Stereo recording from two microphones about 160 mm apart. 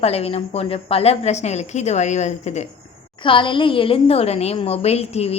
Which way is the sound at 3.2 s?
30° left (ahead or behind).